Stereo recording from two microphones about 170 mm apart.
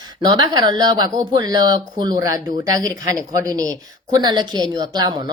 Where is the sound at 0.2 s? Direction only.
25° right (ahead or behind).